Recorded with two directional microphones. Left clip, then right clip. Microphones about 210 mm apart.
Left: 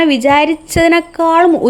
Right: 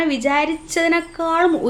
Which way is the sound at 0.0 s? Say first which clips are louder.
Left 8 dB; 40° left (ahead or behind).